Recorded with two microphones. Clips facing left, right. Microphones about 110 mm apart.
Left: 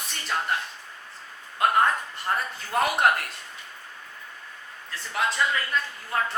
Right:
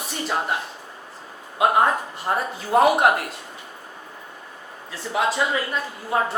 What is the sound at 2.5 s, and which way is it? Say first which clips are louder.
Speech: right 11 dB; 10° right (ahead or behind).